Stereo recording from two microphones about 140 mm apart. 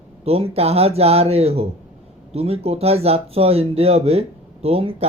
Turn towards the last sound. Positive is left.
turn(degrees=-40)  # may be behind; listen again after turning